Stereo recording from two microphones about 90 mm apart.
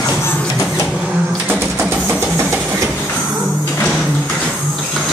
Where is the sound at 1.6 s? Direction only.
25° right (ahead or behind).